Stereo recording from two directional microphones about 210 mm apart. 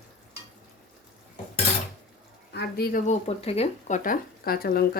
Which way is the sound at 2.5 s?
45° left (ahead or behind).